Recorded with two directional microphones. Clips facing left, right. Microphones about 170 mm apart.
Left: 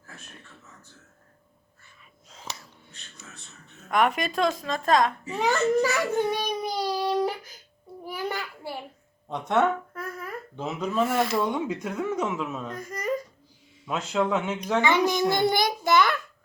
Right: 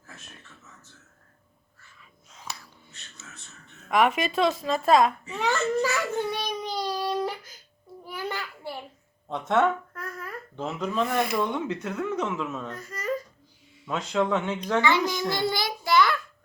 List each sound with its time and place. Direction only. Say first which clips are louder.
2.3 s a sound: left 1 dB; 25° left (ahead or behind)
3.8 s a woman's voice: right 1 dB; centre (ahead or behind)
5.3 s a sound: left 3 dB; 15° left (ahead or behind)
8.0 s babbling: left 2 dB; 10° left (ahead or behind)
9.5 s speech: even; 5° left (ahead or behind)
11.2 s speech: left 1 dB; 10° right (ahead or behind)
11.5 s speech: left 1 dB; 10° left (ahead or behind)
14.8 s a child's voice: left 3 dB; 20° left (ahead or behind)